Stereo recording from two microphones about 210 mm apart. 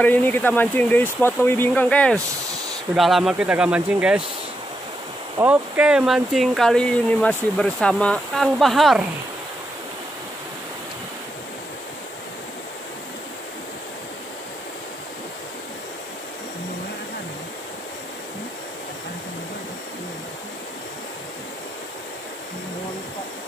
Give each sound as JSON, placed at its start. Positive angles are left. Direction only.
{"t": 0.0, "sound": "speech", "side_deg": 10}
{"t": 5.4, "sound": "speech", "side_deg": -5}